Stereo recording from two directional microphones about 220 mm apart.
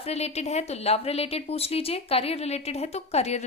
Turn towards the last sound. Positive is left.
turn(degrees=30)  # may be behind; listen again after turning